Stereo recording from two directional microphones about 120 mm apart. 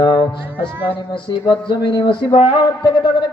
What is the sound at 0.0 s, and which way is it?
A man's voice, 40° left (ahead or behind).